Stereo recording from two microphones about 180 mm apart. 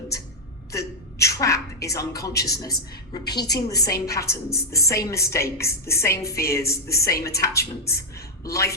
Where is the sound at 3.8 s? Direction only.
60° left (ahead or behind).